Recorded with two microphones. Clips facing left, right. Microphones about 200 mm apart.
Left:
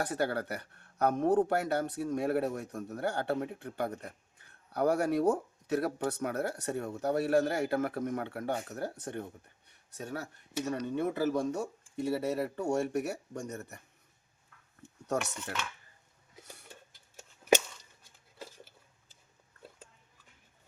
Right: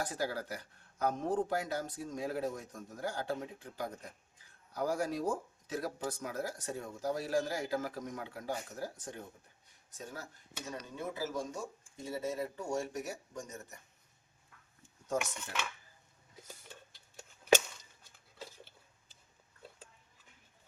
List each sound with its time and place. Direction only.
0.0 s speech: 65° left (ahead or behind)
9.6 s a sound: 65° left (ahead or behind)
10.7 s speech: 65° left (ahead or behind)
15.0 s speech: 70° left (ahead or behind)